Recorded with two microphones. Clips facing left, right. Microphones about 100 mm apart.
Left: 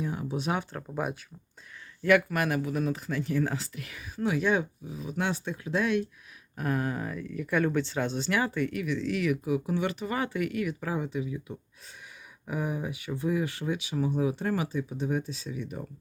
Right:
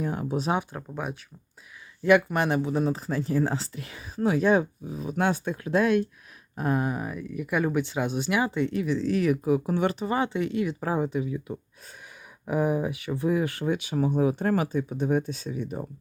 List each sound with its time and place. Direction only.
0.0 s speech: 50° right (ahead or behind)
0.7 s speech: 10° right (ahead or behind)
2.0 s speech: 25° right (ahead or behind); by 6.1 s 50° right (ahead or behind)
6.6 s speech: 25° right (ahead or behind)